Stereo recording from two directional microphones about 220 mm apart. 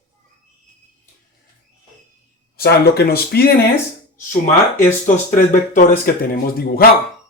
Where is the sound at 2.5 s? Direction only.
45° left (ahead or behind).